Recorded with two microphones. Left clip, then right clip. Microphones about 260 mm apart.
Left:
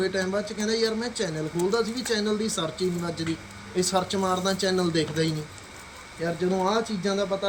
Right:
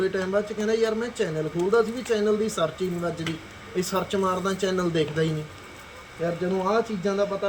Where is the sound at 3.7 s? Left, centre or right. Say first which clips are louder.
Left 1 dB; centre.